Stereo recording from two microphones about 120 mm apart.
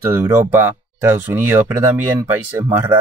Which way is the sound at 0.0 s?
20° right (ahead or behind).